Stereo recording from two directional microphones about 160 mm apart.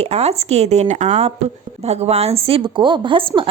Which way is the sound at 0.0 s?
40° right (ahead or behind).